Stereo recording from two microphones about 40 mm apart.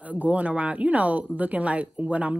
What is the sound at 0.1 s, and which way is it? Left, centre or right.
Speech, right.